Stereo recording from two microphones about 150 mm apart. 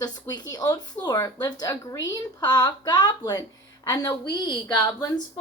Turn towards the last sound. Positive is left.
turn(degrees=25)  # may be behind; listen again after turning